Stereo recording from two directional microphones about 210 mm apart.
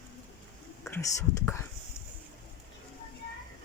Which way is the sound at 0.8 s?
10° left (ahead or behind).